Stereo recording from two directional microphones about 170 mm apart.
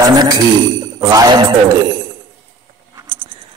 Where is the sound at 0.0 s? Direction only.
25° right (ahead or behind).